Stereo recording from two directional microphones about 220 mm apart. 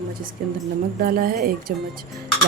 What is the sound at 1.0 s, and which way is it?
Speech, 40° right (ahead or behind).